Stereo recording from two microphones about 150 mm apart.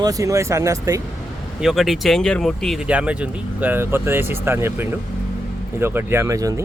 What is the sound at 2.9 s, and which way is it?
Speech, 10° right (ahead or behind).